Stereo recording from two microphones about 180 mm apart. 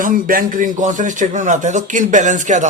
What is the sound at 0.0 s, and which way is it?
A man's voice, 50° right (ahead or behind).